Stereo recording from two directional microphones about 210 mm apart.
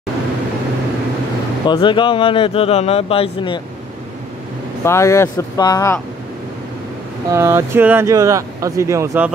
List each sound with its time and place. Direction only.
1.7 s speech: 20° left (ahead or behind)
4.8 s speech: 15° left (ahead or behind)
7.2 s speech: 15° right (ahead or behind)